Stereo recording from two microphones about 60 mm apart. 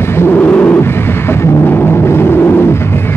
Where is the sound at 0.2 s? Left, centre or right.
Left.